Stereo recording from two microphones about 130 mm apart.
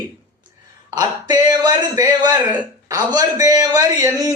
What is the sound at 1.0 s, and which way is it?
A man's voice, 30° right (ahead or behind).